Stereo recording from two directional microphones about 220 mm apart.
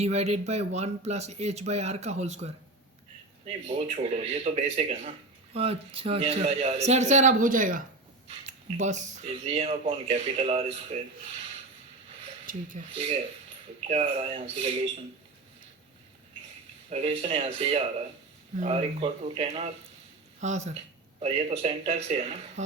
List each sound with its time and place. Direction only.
0.0 s speech: 30° right (ahead or behind)
12.5 s speech: 35° right (ahead or behind)
16.9 s speech: 25° right (ahead or behind)